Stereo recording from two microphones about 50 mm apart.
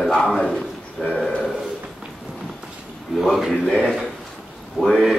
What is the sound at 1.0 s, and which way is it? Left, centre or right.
Speech, centre.